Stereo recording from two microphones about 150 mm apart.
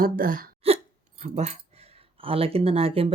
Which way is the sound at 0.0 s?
70° right (ahead or behind).